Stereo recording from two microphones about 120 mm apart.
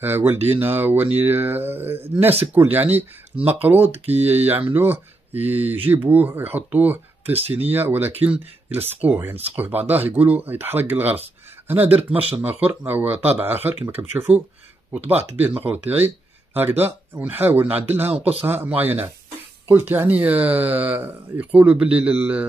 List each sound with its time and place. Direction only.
0.0 s speech: 15° right (ahead or behind)
3.8 s speech: 60° right (ahead or behind)
4.2 s speech: 15° right (ahead or behind)
7.2 s speech: 55° right (ahead or behind)
7.7 s speech: 15° right (ahead or behind)
17.1 s speech: 15° right (ahead or behind)